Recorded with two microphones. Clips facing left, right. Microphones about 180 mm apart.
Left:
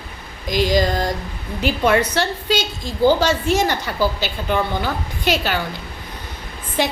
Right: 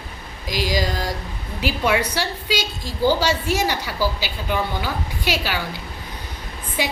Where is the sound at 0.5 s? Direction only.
50° left (ahead or behind).